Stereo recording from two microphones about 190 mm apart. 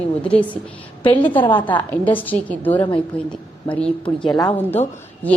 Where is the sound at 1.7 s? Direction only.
10° left (ahead or behind).